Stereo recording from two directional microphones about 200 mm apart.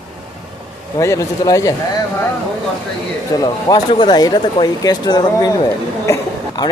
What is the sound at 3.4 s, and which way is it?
Speech, 20° left (ahead or behind).